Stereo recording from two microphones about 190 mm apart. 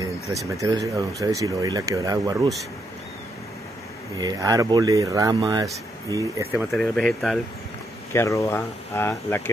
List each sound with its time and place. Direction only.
0.0 s speech: 15° right (ahead or behind)
4.2 s speech: 20° right (ahead or behind)
6.7 s speech: centre (ahead or behind)
8.1 s speech: 15° left (ahead or behind)